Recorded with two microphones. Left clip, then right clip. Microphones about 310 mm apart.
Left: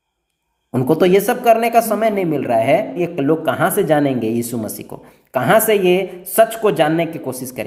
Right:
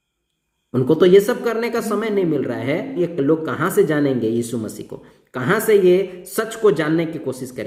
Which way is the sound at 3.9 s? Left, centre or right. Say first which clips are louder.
Left 3 dB; left.